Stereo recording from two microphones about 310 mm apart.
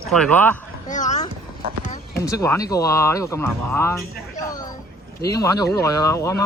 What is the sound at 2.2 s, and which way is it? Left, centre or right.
Speech, centre.